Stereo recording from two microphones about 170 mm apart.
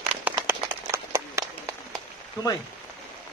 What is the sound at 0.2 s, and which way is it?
Run, 15° right (ahead or behind).